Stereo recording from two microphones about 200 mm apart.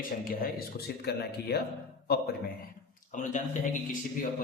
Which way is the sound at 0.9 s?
55° left (ahead or behind).